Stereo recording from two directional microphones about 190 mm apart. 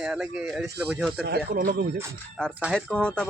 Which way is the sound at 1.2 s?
55° right (ahead or behind).